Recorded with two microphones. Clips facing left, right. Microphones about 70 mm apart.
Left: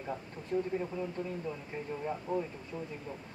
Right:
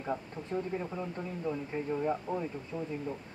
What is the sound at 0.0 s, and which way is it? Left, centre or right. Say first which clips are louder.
Speech: right 4 dB; right.